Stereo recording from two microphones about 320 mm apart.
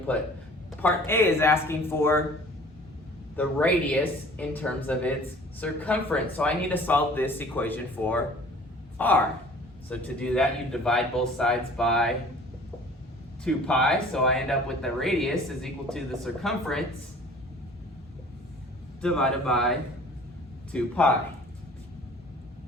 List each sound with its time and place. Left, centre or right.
0.8 s speech: centre
3.3 s a woman's voice: centre
13.4 s speech: centre
19.0 s speech: centre
20.7 s speech: centre